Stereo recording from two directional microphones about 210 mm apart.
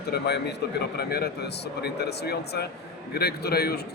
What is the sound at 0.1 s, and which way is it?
Speech, 50° left (ahead or behind).